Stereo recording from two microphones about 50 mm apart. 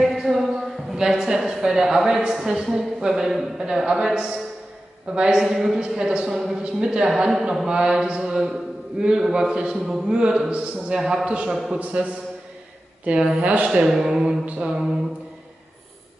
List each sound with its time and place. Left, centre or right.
0.0 s a sound: centre
0.9 s a man's voice: centre
5.4 s a man's voice: centre
5.9 s a man's voice: centre
6.3 s a man's voice: centre
6.6 s speech: centre
7.1 s speech: centre
10.1 s a man's voice: centre
11.5 s speech: centre
11.8 s a man's voice: right
13.8 s speech: centre
14.4 s a man's voice: right
14.7 s speech: centre